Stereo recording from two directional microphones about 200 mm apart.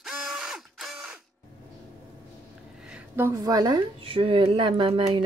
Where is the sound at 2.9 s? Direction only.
10° right (ahead or behind).